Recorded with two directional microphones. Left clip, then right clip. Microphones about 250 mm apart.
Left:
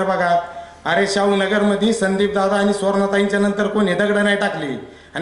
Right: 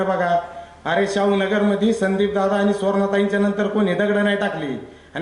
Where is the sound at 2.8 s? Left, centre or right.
Centre.